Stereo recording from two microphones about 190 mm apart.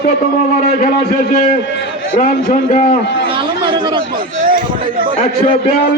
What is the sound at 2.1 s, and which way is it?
Speech, 40° left (ahead or behind).